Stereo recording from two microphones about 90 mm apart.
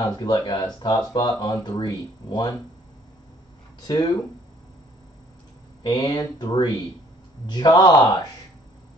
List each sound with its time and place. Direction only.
0.0 s speech: 45° left (ahead or behind)
3.8 s speech: 50° left (ahead or behind)
5.9 s speech: 50° left (ahead or behind)